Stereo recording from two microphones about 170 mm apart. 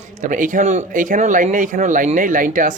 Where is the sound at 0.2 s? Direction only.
50° right (ahead or behind).